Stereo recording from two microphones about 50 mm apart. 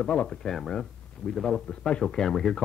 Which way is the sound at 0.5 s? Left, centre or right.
Centre.